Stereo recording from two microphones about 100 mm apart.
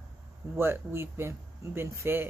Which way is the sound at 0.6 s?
25° right (ahead or behind).